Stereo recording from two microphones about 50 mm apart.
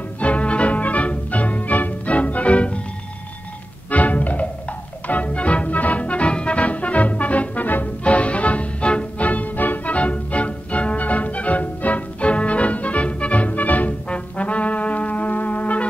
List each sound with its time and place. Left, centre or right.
0.2 s music: left
3.9 s music: left